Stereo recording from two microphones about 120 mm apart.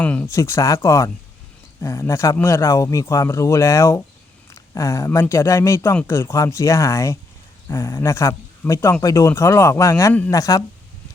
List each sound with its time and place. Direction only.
0.0 s speech: 10° left (ahead or behind)
0.3 s speech: 25° left (ahead or behind)
4.4 s a sound: 25° left (ahead or behind)
5.2 s speech: 25° left (ahead or behind)